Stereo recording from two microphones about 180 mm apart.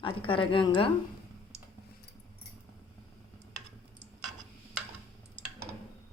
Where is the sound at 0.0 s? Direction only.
30° left (ahead or behind).